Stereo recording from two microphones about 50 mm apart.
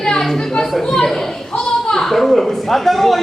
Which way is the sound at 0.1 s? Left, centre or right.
Centre.